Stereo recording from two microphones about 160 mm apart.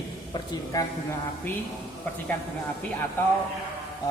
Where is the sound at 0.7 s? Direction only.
20° left (ahead or behind).